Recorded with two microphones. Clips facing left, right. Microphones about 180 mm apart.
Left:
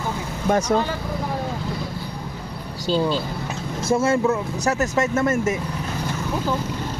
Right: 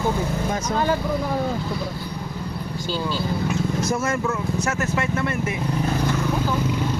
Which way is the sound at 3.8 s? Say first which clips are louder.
Left 4 dB; 30° left (ahead or behind).